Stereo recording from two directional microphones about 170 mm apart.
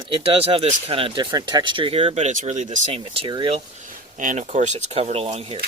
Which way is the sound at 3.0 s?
30° right (ahead or behind).